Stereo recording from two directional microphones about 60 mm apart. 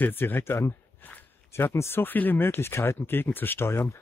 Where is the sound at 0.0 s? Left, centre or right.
Left.